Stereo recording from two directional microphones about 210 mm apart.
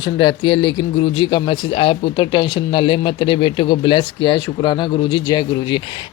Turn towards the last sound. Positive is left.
turn(degrees=20)  # may be behind; listen again after turning